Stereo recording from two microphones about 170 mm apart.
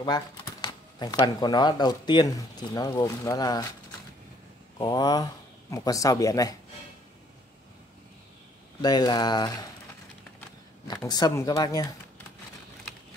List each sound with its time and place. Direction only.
0.0 s speech: 25° left (ahead or behind)
4.7 s speech: 25° left (ahead or behind)
8.8 s speech: 25° left (ahead or behind)
10.9 s speech: 25° left (ahead or behind)